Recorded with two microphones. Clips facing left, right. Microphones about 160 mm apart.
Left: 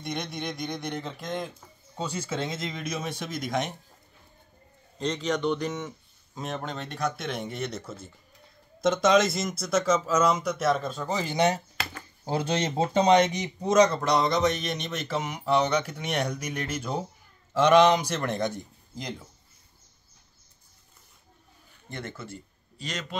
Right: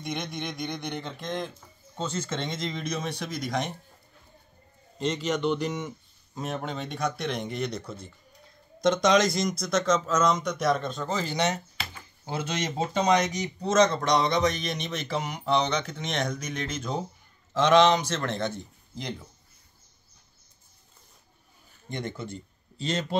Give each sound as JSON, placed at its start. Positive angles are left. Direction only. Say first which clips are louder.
{"t": 0.0, "sound": "speech", "louder": "even", "side_deg": 0}
{"t": 4.9, "sound": "speech", "louder": "even", "side_deg": -5}
{"t": 13.0, "sound": "speech", "louder": "left 3 dB", "side_deg": 25}
{"t": 13.7, "sound": "speech", "louder": "left 1 dB", "side_deg": 10}
{"t": 21.8, "sound": "speech", "louder": "right 4 dB", "side_deg": -15}